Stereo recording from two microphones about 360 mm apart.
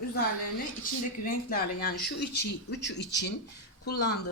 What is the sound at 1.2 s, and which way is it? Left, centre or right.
Speech, left.